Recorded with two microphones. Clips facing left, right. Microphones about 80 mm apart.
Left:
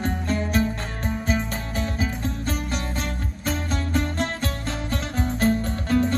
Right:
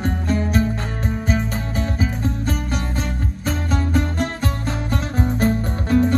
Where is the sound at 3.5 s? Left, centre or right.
Centre.